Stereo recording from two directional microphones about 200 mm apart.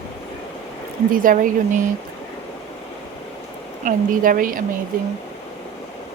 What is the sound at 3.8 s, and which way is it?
Speech, 45° right (ahead or behind).